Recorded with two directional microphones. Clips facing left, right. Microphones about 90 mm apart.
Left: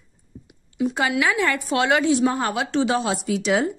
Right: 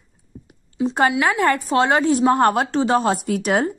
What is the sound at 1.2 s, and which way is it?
A woman's voice, 40° right (ahead or behind).